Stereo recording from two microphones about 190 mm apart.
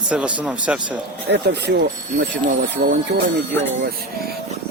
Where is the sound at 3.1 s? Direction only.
60° right (ahead or behind).